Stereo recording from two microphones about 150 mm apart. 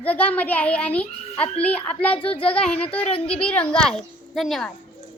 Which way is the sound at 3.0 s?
40° left (ahead or behind).